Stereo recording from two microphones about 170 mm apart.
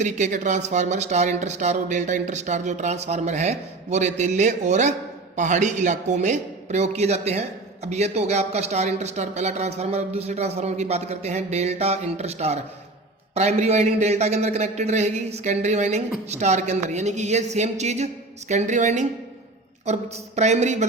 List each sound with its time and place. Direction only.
0.0 s a man's voice: 45° right (ahead or behind)